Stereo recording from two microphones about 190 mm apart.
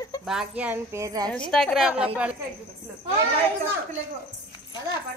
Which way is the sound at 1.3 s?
5° left (ahead or behind).